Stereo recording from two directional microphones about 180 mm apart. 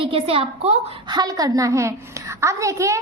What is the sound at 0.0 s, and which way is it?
Speech, 30° right (ahead or behind).